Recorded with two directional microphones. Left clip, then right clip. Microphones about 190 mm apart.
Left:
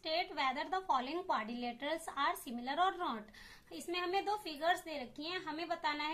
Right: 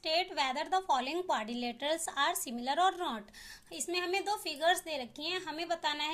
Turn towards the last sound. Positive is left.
turn(degrees=-40)  # may be behind; listen again after turning